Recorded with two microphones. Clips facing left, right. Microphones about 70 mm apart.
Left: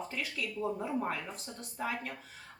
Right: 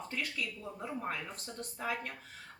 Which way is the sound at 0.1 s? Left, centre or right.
Centre.